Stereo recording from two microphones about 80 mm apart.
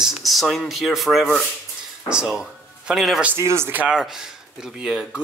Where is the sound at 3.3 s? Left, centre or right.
Right.